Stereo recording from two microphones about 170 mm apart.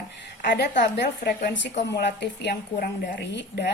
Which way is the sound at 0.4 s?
80° left.